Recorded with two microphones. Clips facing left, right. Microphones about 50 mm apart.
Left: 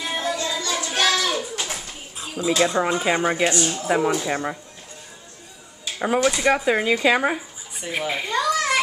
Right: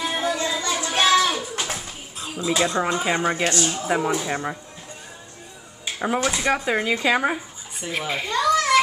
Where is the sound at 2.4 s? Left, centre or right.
Centre.